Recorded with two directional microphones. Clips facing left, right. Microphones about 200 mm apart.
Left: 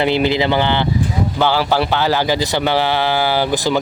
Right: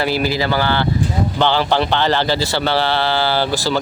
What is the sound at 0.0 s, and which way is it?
Speech, 20° left (ahead or behind).